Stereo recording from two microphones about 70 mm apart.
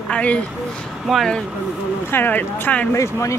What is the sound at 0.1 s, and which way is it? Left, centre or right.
Speech, centre.